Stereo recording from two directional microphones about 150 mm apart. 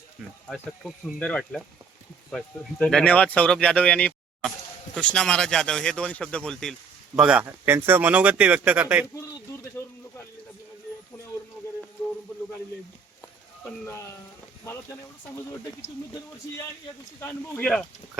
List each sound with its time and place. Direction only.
0.5 s speech: 5° right (ahead or behind)
14.6 s speech: 20° left (ahead or behind)
17.2 s speech: 15° left (ahead or behind)